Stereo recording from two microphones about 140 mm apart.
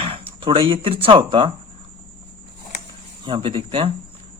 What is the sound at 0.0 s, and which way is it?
Speech, 40° right (ahead or behind).